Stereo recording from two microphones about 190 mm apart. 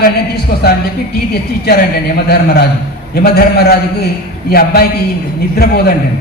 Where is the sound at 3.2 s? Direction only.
55° left (ahead or behind).